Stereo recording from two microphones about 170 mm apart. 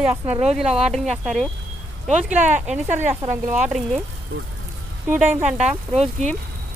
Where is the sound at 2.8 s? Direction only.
45° right (ahead or behind).